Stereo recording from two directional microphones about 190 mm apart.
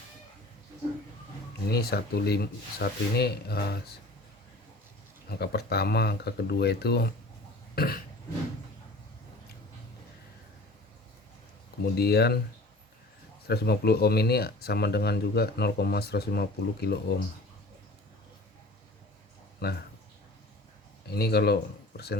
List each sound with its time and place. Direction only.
1.7 s speech: 55° left (ahead or behind)
5.3 s speech: 55° left (ahead or behind)
7.8 s burping: 50° left (ahead or behind)
11.9 s speech: 55° left (ahead or behind)
13.5 s speech: 55° left (ahead or behind)
19.6 s speech: 55° left (ahead or behind)
21.1 s speech: 55° left (ahead or behind)